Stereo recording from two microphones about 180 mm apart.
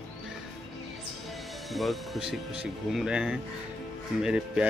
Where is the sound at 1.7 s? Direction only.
Centre (ahead or behind).